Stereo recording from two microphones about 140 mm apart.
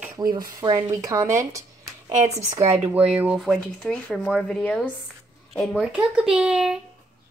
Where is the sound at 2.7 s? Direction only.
10° right (ahead or behind).